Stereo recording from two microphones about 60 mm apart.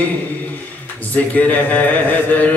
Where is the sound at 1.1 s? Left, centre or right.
Left.